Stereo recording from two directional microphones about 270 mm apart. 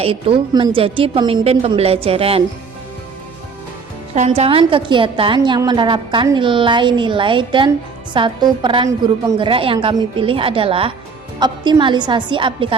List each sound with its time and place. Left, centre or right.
0.0 s a woman's voice: right
4.1 s a woman's voice: right